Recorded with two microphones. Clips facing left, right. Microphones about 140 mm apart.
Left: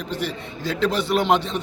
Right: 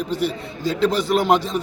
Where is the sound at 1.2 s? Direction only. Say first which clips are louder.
Right 1 dB; 5° right (ahead or behind).